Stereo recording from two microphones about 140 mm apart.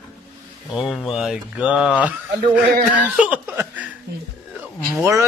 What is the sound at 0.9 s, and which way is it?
Speech, 5° right (ahead or behind).